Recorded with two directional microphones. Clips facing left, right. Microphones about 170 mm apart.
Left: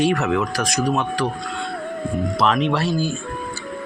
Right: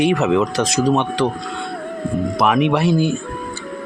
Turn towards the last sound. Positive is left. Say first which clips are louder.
# right 5 dB
turn(degrees=-20)  # may be behind; listen again after turning